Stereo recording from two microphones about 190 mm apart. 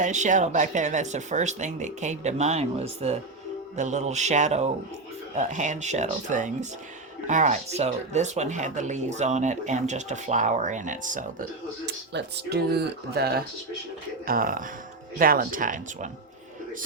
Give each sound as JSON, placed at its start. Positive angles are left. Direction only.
{"t": 0.0, "sound": "speech", "side_deg": -40}
{"t": 11.9, "sound": "speech", "side_deg": -60}